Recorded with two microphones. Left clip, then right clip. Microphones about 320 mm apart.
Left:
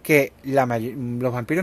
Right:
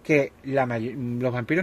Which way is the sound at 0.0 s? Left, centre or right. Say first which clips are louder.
Left 4 dB; centre.